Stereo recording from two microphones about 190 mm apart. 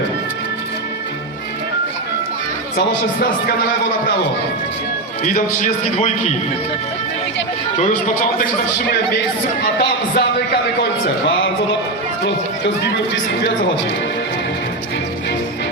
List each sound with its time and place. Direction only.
5.2 s a man's voice: 40° left (ahead or behind)
7.8 s a man's voice: 40° left (ahead or behind)
9.7 s a man's voice: 60° left (ahead or behind)
12.2 s speech: 65° left (ahead or behind)